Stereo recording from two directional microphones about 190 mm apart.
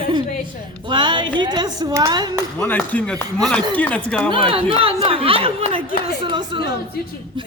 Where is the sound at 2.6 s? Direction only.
5° left (ahead or behind).